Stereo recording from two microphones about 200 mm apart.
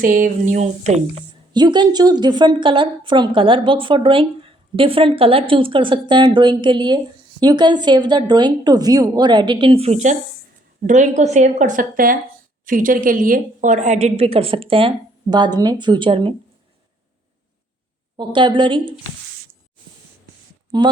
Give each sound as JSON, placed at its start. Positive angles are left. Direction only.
{"t": 0.0, "sound": "speech", "side_deg": -45}
{"t": 1.5, "sound": "a woman's voice", "side_deg": -20}
{"t": 18.2, "sound": "a woman's voice", "side_deg": -25}
{"t": 20.7, "sound": "speech", "side_deg": -25}